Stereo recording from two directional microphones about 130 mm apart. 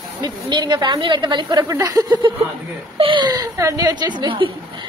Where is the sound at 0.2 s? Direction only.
35° right (ahead or behind).